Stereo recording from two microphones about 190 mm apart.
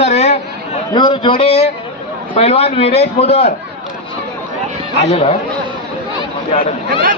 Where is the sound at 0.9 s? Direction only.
25° left (ahead or behind).